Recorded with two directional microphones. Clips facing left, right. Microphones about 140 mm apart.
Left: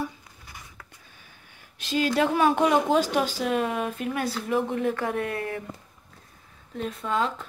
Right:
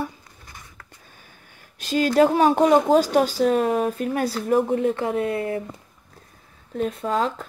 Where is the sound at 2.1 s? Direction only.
40° right (ahead or behind).